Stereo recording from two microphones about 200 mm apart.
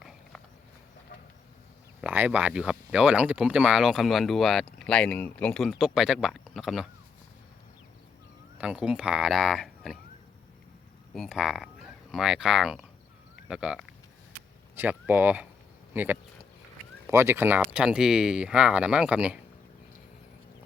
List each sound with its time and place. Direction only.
2.0 s speech: 5° right (ahead or behind)
8.5 s speech: 5° right (ahead or behind)
11.1 s speech: centre (ahead or behind)